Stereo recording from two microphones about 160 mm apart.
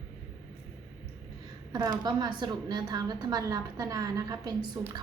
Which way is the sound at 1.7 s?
25° right (ahead or behind).